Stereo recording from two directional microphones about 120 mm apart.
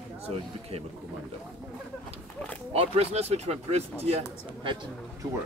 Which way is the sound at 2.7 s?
55° right (ahead or behind).